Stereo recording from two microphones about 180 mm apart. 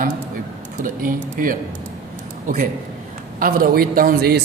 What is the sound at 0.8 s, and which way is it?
Speech, 50° right (ahead or behind).